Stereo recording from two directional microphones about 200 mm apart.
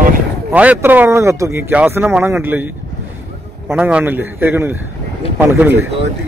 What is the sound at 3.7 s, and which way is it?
A man's voice, 5° right (ahead or behind).